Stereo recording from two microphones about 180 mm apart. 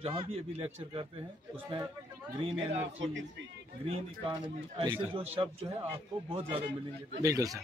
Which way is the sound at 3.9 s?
30° right (ahead or behind).